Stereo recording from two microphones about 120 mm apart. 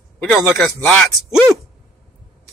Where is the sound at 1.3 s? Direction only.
5° right (ahead or behind).